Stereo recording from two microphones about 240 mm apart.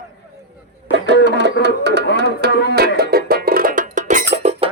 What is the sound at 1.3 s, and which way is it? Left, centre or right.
Speech, right.